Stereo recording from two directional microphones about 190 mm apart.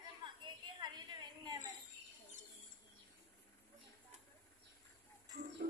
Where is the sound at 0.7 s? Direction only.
25° right (ahead or behind).